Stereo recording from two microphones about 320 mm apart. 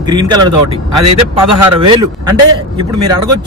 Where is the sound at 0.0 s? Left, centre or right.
Centre.